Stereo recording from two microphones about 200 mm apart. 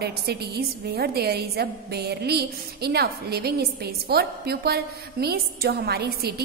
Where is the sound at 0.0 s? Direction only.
55° right (ahead or behind).